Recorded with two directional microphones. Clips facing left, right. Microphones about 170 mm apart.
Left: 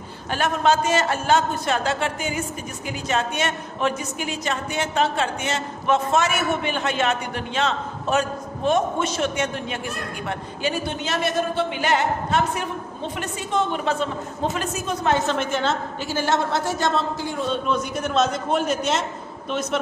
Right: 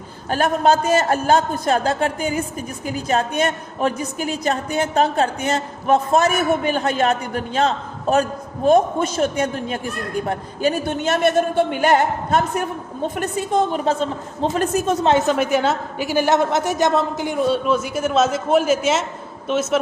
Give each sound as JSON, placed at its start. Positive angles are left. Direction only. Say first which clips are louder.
{"t": 0.3, "sound": "a woman's voice", "louder": "right 4 dB", "side_deg": -40}
{"t": 14.6, "sound": "a man's voice", "louder": "right 8 dB", "side_deg": -55}
{"t": 15.3, "sound": "a woman's voice", "louder": "right 5 dB", "side_deg": -10}
{"t": 17.5, "sound": "a man's voice", "louder": "right 4 dB", "side_deg": -5}